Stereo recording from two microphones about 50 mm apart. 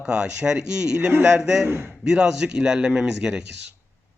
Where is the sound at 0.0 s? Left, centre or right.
Centre.